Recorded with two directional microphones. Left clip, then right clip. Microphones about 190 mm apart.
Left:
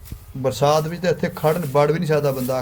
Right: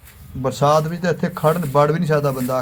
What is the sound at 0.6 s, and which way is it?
A man's voice, 5° left (ahead or behind).